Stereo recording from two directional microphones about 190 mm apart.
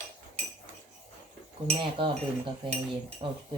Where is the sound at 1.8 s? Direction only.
25° right (ahead or behind).